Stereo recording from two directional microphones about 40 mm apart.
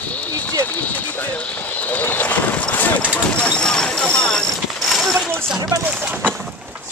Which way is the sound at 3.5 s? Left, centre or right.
Centre.